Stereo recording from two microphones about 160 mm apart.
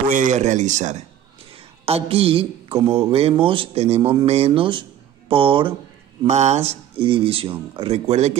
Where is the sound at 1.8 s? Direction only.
40° right (ahead or behind).